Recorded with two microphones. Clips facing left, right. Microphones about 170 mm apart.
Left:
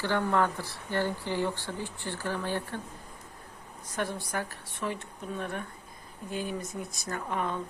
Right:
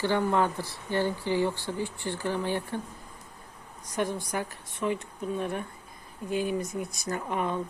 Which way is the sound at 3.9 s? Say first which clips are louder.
Right 3 dB; 15° right (ahead or behind).